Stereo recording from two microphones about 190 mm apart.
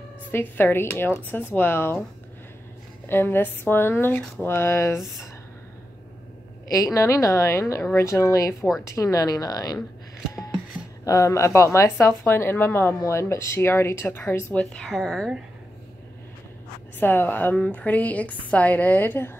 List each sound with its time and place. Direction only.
0.3 s speech: 10° left (ahead or behind)
3.1 s speech: 10° left (ahead or behind)
6.7 s speech: 15° left (ahead or behind)
11.1 s speech: 15° left (ahead or behind)
17.0 s speech: 10° left (ahead or behind)